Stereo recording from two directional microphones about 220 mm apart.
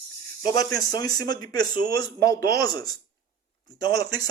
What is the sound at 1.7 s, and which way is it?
Speech, 40° right (ahead or behind).